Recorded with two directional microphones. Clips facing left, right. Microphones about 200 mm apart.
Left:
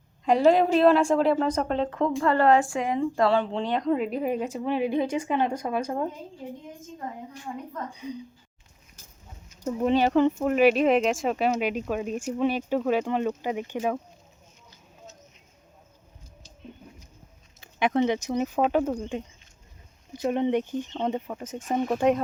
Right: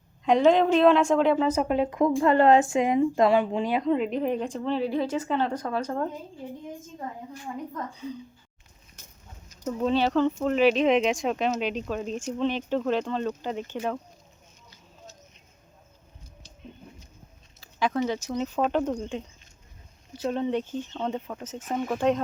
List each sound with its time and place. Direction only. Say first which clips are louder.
0.3 s speech: even; 5° left (ahead or behind)
8.0 s speech: left 1 dB; 15° left (ahead or behind)
9.7 s speech: left 2 dB; 15° left (ahead or behind)
17.6 s speech: left 3 dB; 20° left (ahead or behind)
18.3 s speech: left 1 dB; 10° left (ahead or behind)